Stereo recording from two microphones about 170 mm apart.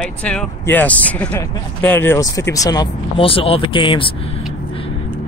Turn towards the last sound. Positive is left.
turn(degrees=30)  # may be behind; listen again after turning